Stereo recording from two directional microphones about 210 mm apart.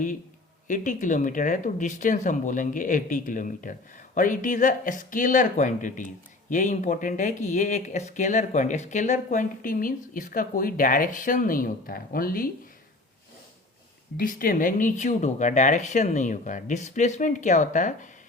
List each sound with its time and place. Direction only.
0.7 s speech: 40° left (ahead or behind)
14.2 s speech: 45° left (ahead or behind)